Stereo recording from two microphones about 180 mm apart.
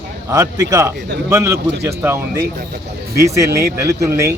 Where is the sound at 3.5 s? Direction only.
15° right (ahead or behind).